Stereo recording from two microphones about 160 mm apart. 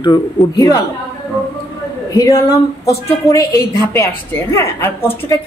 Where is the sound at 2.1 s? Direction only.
20° left (ahead or behind).